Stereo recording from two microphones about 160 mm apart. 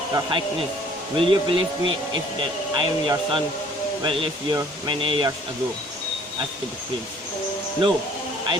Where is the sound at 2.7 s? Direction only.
30° right (ahead or behind).